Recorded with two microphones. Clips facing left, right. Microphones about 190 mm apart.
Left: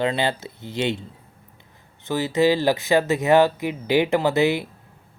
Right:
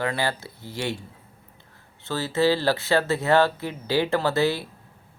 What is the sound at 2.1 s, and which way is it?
Speech, 15° left (ahead or behind).